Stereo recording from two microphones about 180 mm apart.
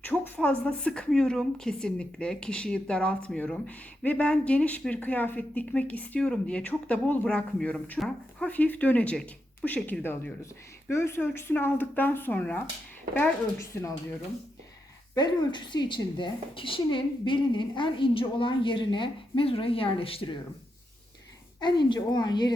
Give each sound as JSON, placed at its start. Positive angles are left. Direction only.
{"t": 0.0, "sound": "speech", "side_deg": 5}
{"t": 15.1, "sound": "a woman's voice", "side_deg": 25}
{"t": 21.6, "sound": "a woman's voice", "side_deg": 25}